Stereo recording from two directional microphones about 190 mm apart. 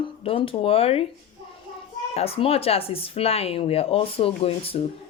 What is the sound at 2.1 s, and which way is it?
Speech, 30° left (ahead or behind).